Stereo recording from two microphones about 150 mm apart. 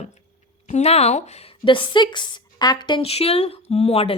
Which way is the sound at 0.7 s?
45° left (ahead or behind).